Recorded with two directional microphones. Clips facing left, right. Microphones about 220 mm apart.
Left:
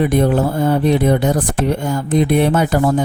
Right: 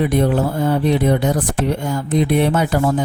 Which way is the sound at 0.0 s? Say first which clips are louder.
Left 2 dB; 45° left (ahead or behind).